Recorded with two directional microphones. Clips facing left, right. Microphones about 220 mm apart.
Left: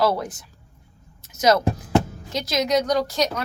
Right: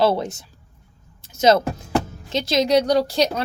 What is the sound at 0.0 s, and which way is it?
A woman's voice, 25° right (ahead or behind).